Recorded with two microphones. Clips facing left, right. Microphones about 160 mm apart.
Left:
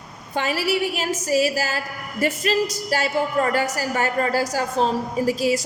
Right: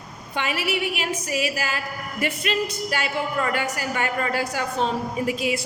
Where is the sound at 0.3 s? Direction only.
40° left (ahead or behind).